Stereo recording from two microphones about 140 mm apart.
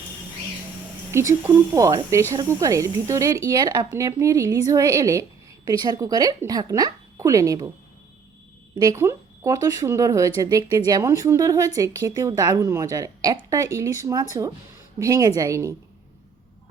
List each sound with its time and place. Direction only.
1.1 s speech: 20° right (ahead or behind)
8.8 s speech: 20° right (ahead or behind)